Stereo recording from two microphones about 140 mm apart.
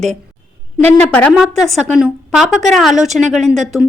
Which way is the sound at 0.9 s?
5° left (ahead or behind).